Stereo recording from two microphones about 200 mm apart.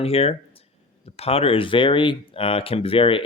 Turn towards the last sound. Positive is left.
turn(degrees=25)  # may be behind; listen again after turning